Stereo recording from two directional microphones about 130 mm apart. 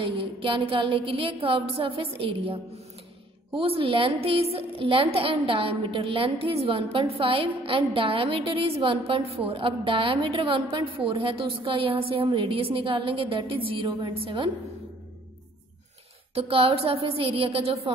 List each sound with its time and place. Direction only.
0.0 s a woman's voice: 40° right (ahead or behind)
16.3 s a woman's voice: 45° right (ahead or behind)